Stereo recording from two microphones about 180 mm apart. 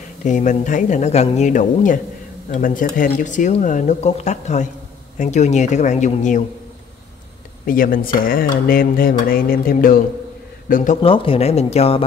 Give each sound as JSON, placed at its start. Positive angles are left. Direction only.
{"t": 0.2, "sound": "speech", "side_deg": 45}
{"t": 7.6, "sound": "speech", "side_deg": 50}
{"t": 11.0, "sound": "speech", "side_deg": 30}